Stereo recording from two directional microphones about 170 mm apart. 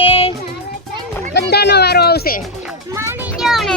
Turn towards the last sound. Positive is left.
turn(degrees=0)  # may be behind; listen again after turning